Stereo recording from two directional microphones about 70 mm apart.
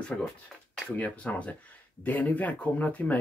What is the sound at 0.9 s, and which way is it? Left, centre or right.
Speech, left.